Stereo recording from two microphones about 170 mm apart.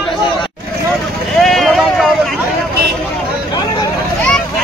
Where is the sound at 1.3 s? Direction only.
Centre (ahead or behind).